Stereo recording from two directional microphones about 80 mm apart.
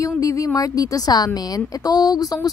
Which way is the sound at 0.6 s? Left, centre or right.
Left.